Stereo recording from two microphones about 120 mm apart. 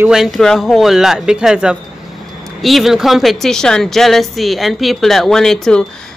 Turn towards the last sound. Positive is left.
turn(degrees=5)  # may be behind; listen again after turning